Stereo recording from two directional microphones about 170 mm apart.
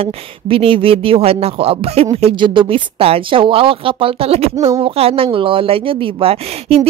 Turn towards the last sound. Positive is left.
turn(degrees=-35)  # may be behind; listen again after turning